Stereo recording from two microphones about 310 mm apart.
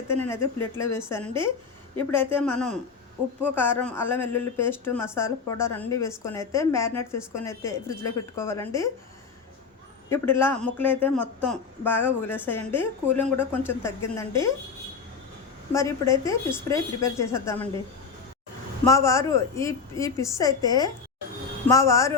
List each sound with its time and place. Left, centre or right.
0.2 s speech: centre
10.1 s speech: centre
15.7 s speech: centre
18.9 s speech: centre